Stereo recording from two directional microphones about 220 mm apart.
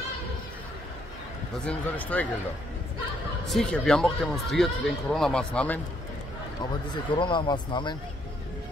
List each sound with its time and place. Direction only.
1.6 s a man's voice: 5° left (ahead or behind)
3.4 s speech: centre (ahead or behind)
6.9 s speech: 20° left (ahead or behind)